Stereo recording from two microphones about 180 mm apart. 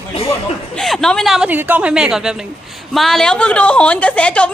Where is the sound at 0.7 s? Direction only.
Centre (ahead or behind).